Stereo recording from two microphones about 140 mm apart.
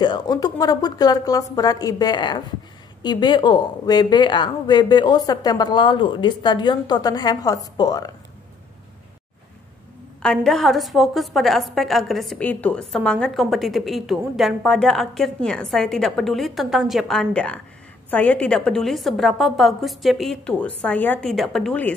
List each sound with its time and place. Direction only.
0.0 s speech: 30° left (ahead or behind)
10.2 s a woman's voice: 5° left (ahead or behind)